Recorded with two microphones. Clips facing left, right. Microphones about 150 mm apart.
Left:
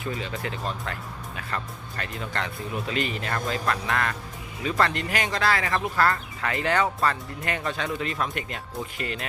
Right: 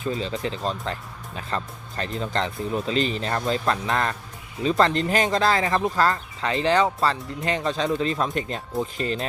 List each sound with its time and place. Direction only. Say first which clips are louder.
0.0 s speech: right 4 dB; 25° right (ahead or behind)